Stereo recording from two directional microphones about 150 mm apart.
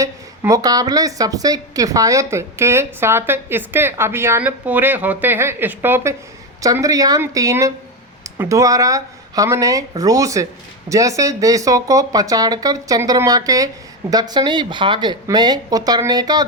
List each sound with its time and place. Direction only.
0.0 s a woman's voice: 20° right (ahead or behind)